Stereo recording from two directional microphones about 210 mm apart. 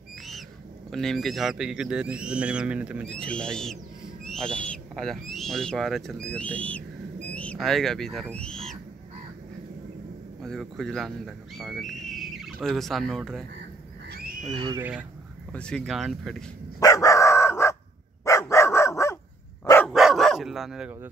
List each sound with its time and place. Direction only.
0.8 s speech: centre (ahead or behind)
3.2 s owl: 5° left (ahead or behind)
7.3 s speech: 5° left (ahead or behind)
10.4 s speech: centre (ahead or behind)
14.1 s a sound: 45° right (ahead or behind)
14.7 s speech: 10° right (ahead or behind)
15.5 s speech: 5° left (ahead or behind)
16.8 s chicken: 15° left (ahead or behind)
18.2 s dog: 15° left (ahead or behind)
19.9 s dog: centre (ahead or behind)